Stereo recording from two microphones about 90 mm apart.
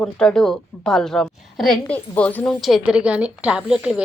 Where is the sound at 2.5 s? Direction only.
Centre (ahead or behind).